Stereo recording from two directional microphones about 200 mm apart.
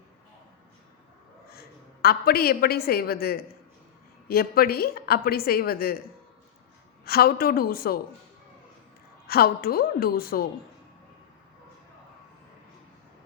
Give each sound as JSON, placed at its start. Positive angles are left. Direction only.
{"t": 1.5, "sound": "a woman's voice", "side_deg": 50}
{"t": 7.0, "sound": "a woman's voice", "side_deg": 50}
{"t": 9.2, "sound": "a woman's voice", "side_deg": 50}